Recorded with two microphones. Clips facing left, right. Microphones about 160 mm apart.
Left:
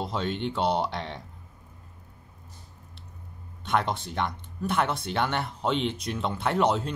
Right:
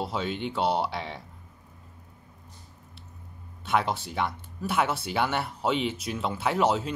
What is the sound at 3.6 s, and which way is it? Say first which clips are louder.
Speech: even; 5° right (ahead or behind).